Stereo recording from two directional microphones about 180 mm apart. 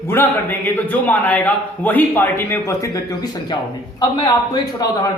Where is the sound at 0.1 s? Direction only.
10° left (ahead or behind).